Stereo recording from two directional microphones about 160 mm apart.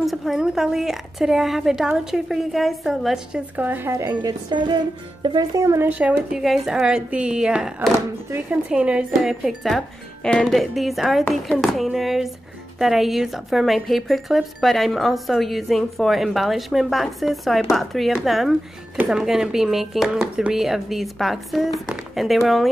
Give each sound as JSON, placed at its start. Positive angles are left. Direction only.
{"t": 0.0, "sound": "speech", "side_deg": 0}
{"t": 3.6, "sound": "speech", "side_deg": -15}